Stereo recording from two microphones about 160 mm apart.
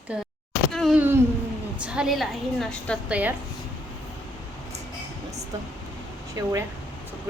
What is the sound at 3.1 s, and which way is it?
Speech, 10° right (ahead or behind).